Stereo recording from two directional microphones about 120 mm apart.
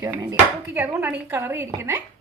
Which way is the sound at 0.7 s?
15° right (ahead or behind).